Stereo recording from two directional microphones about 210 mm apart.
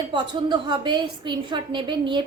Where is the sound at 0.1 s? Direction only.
20° right (ahead or behind).